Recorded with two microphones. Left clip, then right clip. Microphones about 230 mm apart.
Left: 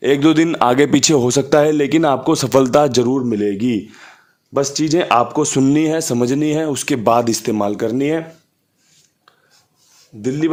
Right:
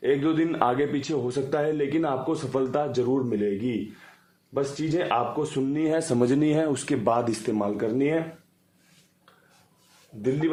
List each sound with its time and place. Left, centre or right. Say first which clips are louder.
0.0 s a man's voice: left 10 dB; left
5.8 s speech: left 6 dB; left
10.4 s a man's voice: left 9 dB; left